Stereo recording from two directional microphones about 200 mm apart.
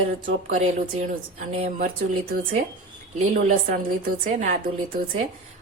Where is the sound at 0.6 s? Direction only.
35° right (ahead or behind).